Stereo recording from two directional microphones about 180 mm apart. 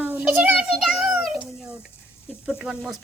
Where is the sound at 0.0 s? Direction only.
10° right (ahead or behind).